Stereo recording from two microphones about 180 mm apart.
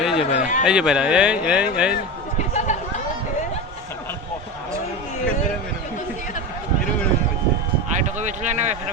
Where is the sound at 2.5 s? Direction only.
40° left (ahead or behind).